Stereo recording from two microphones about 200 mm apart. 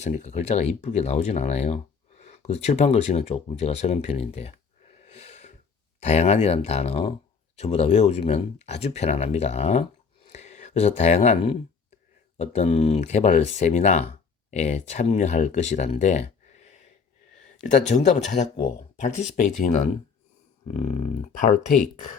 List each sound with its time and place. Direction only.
0.0 s speech: 35° left (ahead or behind)